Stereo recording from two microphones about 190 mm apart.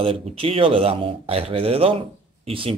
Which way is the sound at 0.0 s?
30° right (ahead or behind).